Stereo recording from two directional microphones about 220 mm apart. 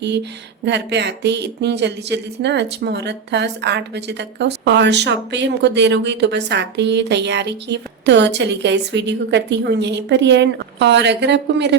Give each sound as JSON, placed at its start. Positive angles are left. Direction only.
{"t": 0.6, "sound": "speech", "side_deg": -50}